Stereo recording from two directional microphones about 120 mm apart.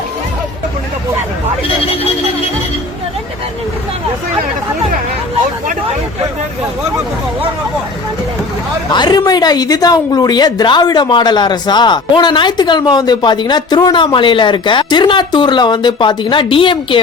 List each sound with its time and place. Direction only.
8.9 s a woman's voice: 35° left (ahead or behind)